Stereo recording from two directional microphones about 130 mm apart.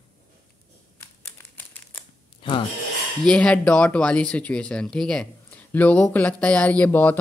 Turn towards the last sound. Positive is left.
turn(degrees=15)  # may be behind; listen again after turning